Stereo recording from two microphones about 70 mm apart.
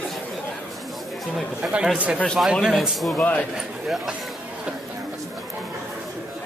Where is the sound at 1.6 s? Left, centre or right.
Centre.